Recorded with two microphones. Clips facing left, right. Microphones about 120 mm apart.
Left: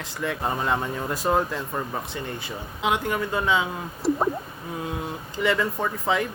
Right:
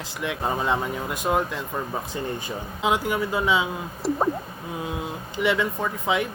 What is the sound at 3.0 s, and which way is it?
Speech, 5° right (ahead or behind).